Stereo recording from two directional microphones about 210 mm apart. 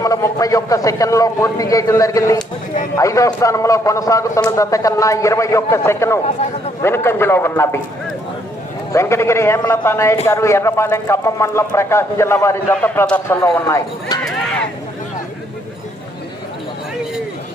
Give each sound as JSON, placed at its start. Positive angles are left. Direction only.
{"t": 0.0, "sound": "speech", "side_deg": 15}
{"t": 8.9, "sound": "speech", "side_deg": 15}